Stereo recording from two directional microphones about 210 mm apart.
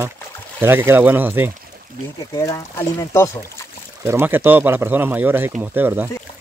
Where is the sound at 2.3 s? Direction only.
15° left (ahead or behind).